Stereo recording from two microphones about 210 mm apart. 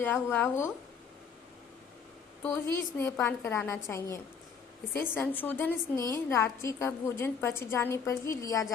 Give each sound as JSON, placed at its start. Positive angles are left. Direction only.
{"t": 0.0, "sound": "a woman's voice", "side_deg": 10}
{"t": 2.4, "sound": "a woman's voice", "side_deg": 10}